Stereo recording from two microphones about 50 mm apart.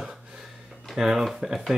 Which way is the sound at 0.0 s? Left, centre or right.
Centre.